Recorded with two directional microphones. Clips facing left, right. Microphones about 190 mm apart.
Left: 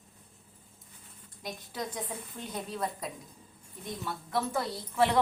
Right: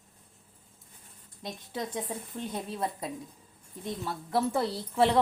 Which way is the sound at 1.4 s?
25° right (ahead or behind).